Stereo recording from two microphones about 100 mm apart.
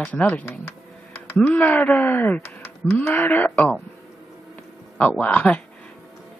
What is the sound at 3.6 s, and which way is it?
Speech, 5° left (ahead or behind).